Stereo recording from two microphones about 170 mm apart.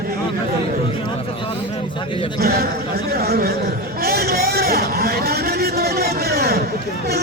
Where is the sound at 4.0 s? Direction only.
65° right (ahead or behind).